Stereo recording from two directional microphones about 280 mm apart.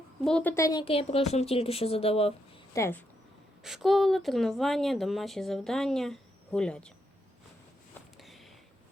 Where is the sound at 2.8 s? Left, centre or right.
Centre.